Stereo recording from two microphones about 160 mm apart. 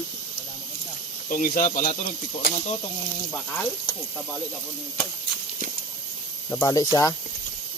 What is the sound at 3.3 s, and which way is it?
Speech, 5° left (ahead or behind).